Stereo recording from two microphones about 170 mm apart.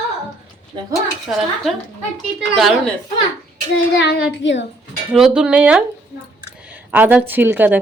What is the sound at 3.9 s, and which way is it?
Speech, 85° left.